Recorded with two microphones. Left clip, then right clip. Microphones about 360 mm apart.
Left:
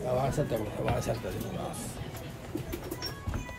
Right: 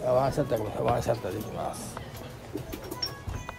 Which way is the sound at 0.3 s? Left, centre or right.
Centre.